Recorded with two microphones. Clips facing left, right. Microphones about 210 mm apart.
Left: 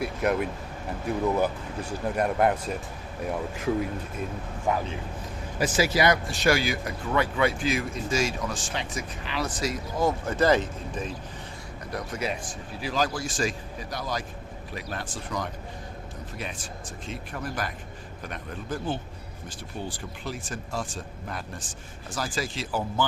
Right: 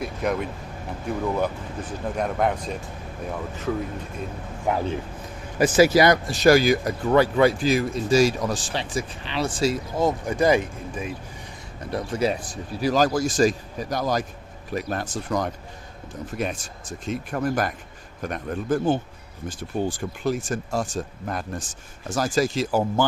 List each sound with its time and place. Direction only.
0.0 s speech: 5° left (ahead or behind)
5.5 s speech: 45° right (ahead or behind); by 11.1 s 10° right (ahead or behind)
11.9 s speech: 30° right (ahead or behind)